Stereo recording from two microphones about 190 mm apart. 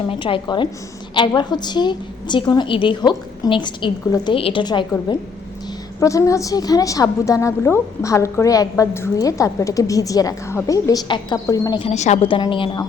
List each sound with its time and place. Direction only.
0.1 s a woman's voice: 25° left (ahead or behind)
6.0 s a woman's voice: 15° left (ahead or behind)
11.9 s a woman's voice: 35° left (ahead or behind)